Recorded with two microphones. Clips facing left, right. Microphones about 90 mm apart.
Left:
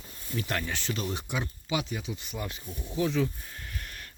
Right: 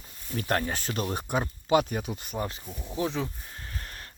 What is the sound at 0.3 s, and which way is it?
Speech, 40° right (ahead or behind).